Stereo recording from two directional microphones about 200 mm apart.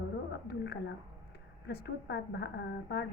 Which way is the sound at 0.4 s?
55° left (ahead or behind).